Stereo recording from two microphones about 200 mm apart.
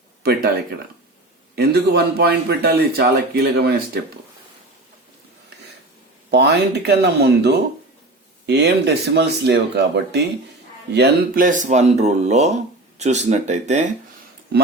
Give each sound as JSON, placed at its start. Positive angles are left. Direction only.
{"t": 0.2, "sound": "speech", "side_deg": -50}
{"t": 1.5, "sound": "speech", "side_deg": -55}
{"t": 6.3, "sound": "speech", "side_deg": -55}